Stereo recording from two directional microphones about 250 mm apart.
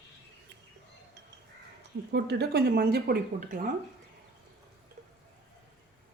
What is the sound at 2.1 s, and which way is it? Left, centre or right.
Speech, right.